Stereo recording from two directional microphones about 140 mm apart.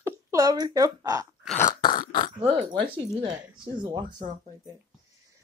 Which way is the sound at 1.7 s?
30° left (ahead or behind).